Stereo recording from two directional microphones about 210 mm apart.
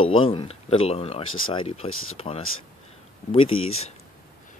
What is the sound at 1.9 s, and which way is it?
Speech, 80° left.